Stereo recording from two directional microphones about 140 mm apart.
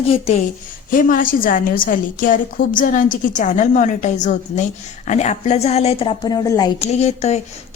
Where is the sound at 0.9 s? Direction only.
80° left; by 6.1 s 45° left (ahead or behind).